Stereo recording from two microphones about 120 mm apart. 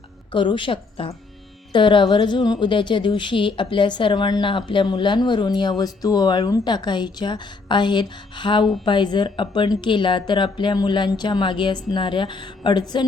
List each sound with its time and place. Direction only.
0.3 s a woman's voice: 40° left (ahead or behind)